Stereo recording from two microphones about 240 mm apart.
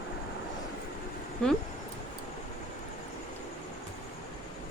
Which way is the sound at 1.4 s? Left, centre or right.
Centre.